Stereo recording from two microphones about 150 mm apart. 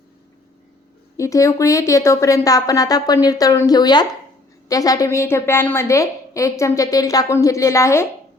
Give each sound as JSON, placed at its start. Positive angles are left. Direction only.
{"t": 1.1, "sound": "a woman's voice", "side_deg": 20}